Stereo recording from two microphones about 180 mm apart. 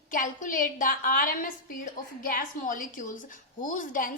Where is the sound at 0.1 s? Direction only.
45° left (ahead or behind).